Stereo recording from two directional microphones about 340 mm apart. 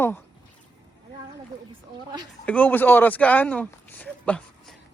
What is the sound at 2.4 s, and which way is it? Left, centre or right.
Speech, centre.